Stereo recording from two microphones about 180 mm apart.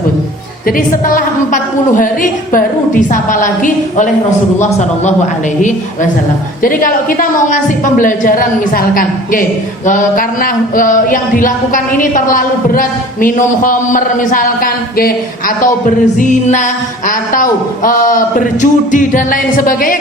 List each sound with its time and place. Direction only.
2.0 s a man's voice: 50° left (ahead or behind)
6.6 s speech: 50° left (ahead or behind)
17.8 s speech: 50° left (ahead or behind)